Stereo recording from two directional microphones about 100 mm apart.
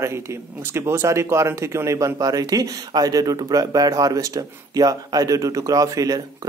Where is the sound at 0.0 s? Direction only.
30° right (ahead or behind).